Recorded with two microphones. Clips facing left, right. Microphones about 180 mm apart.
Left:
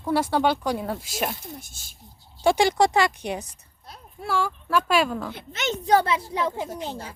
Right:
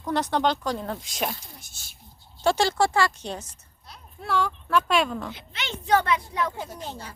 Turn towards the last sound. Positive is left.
turn(degrees=10)  # may be behind; listen again after turning